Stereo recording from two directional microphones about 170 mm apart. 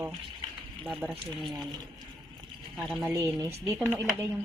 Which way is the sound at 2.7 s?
Centre (ahead or behind).